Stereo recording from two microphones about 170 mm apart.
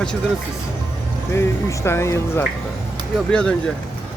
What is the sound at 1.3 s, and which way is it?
Speech, 15° left (ahead or behind).